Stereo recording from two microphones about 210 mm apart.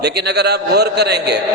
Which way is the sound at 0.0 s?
50° right (ahead or behind).